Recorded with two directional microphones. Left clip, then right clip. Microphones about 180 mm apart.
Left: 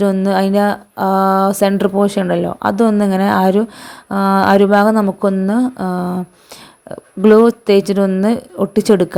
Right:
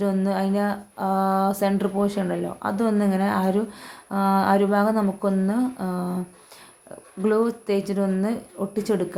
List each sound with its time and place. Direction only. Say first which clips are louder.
0.0 s speech: left 10 dB; 45° left (ahead or behind)